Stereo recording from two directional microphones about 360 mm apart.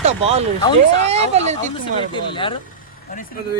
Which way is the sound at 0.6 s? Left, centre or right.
Centre.